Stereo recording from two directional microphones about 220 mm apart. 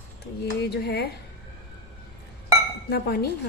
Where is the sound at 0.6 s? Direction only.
50° left (ahead or behind).